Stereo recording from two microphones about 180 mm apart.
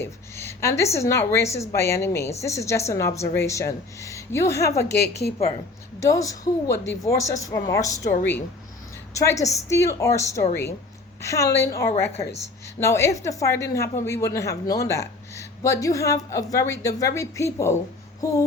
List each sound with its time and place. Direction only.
0.0 s a sound: 15° left (ahead or behind)
0.9 s a woman's voice: 15° left (ahead or behind)
4.9 s a woman's voice: 65° left (ahead or behind)
6.0 s a woman's voice: 15° left (ahead or behind)
18.2 s child singing: 20° left (ahead or behind)